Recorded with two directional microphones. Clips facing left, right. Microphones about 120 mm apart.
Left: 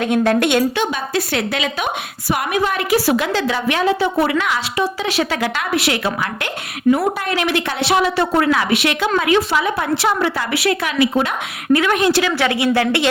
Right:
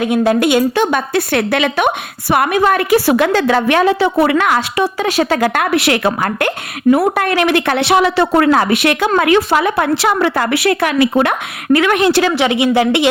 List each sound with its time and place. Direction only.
0.0 s a woman's voice: 5° right (ahead or behind)
0.8 s speech: 55° right (ahead or behind)
5.7 s a woman's voice: 60° right (ahead or behind)
6.9 s speech: 65° right (ahead or behind)
8.4 s speech: 45° right (ahead or behind); by 12.2 s 70° right (ahead or behind)
12.4 s speech: 20° right (ahead or behind)